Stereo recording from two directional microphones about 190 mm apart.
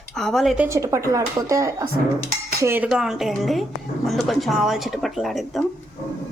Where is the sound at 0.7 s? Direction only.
15° right (ahead or behind); by 5.6 s centre (ahead or behind).